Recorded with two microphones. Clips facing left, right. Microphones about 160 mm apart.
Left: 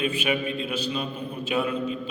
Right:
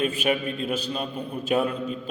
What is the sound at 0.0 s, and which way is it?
A man's voice, 45° right (ahead or behind).